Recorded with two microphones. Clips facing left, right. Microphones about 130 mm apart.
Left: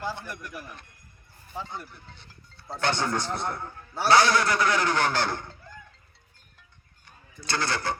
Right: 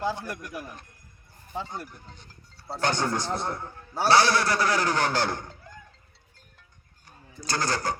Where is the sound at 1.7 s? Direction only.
45° right (ahead or behind).